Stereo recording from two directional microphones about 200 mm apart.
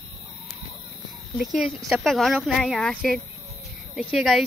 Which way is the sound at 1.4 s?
Centre (ahead or behind).